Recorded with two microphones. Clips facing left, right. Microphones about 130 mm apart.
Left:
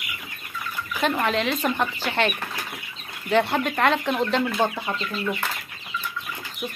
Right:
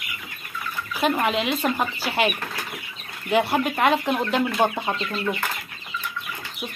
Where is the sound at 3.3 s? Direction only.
5° right (ahead or behind).